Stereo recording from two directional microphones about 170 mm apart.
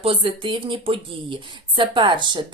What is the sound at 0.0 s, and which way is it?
Speech, 30° right (ahead or behind).